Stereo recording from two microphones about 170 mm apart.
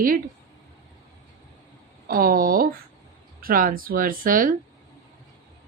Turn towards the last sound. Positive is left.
turn(degrees=-55)  # may be behind; listen again after turning